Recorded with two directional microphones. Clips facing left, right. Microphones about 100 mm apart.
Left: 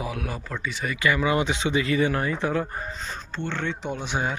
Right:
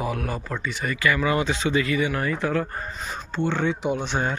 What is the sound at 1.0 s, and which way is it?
Speech, 20° left (ahead or behind).